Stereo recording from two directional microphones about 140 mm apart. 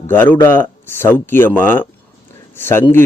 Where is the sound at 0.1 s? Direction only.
15° left (ahead or behind).